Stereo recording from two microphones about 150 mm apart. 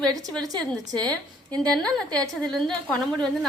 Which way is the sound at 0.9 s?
10° left (ahead or behind).